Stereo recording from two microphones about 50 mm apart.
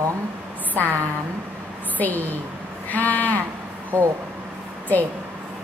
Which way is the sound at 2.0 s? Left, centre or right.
Left.